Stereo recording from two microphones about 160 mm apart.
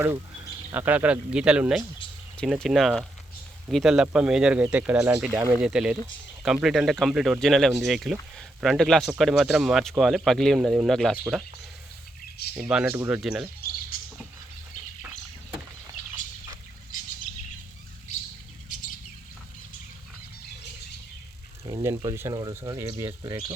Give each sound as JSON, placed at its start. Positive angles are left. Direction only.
{"t": 0.7, "sound": "a man's voice", "side_deg": -10}
{"t": 5.3, "sound": "a man's voice", "side_deg": -15}
{"t": 5.6, "sound": "speech", "side_deg": -5}
{"t": 12.5, "sound": "speech", "side_deg": -5}
{"t": 21.6, "sound": "a sound", "side_deg": -35}
{"t": 22.1, "sound": "a man's voice", "side_deg": -15}
{"t": 22.4, "sound": "speech", "side_deg": -25}